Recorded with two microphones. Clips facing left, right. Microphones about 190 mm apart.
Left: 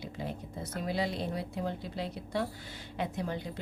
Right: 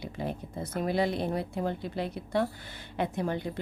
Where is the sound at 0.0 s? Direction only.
55° right (ahead or behind).